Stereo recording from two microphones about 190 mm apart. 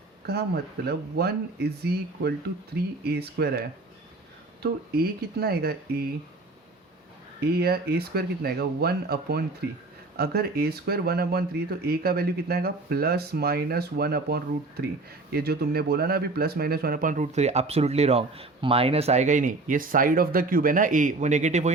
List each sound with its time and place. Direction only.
0.9 s speech: 55° right (ahead or behind)
4.6 s speech: 55° right (ahead or behind)
7.4 s speech: 55° right (ahead or behind); by 21.7 s 40° right (ahead or behind)